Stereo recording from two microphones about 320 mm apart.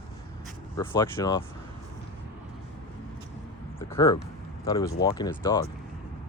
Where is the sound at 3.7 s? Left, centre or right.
Centre.